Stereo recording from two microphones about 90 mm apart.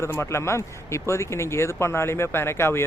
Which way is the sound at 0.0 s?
30° left (ahead or behind).